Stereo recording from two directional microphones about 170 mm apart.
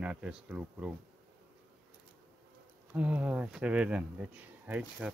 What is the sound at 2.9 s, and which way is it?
Speech, 5° right (ahead or behind).